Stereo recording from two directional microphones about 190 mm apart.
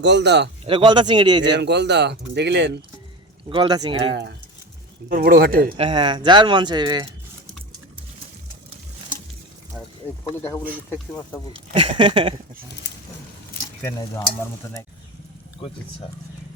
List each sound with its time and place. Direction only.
0.0 s speech: 65° right (ahead or behind)
0.7 s speech: 25° right (ahead or behind)
1.5 s speech: 65° right (ahead or behind)
3.5 s speech: 25° right (ahead or behind)
4.1 s speech: 65° right (ahead or behind)
5.0 s speech: 50° right (ahead or behind)
5.7 s speech: 25° right (ahead or behind)
11.5 s speech: 30° right (ahead or behind)
13.8 s stir: 15° left (ahead or behind)